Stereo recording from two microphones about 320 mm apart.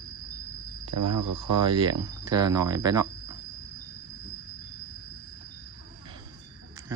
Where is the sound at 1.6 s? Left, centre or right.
Centre.